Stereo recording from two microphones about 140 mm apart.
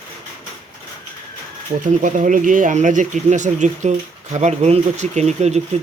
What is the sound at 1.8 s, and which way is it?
Speech, 65° right (ahead or behind).